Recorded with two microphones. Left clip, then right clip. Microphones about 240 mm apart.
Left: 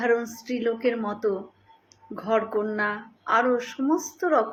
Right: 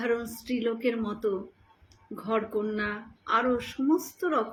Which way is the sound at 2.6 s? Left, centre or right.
Centre.